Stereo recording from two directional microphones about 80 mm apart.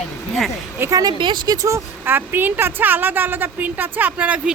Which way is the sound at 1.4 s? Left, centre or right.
Right.